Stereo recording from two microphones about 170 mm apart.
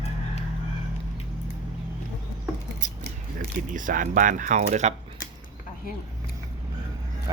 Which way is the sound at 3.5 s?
50° right (ahead or behind).